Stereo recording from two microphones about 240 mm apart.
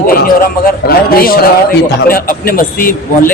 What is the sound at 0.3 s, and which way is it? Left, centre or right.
A man's voice, left.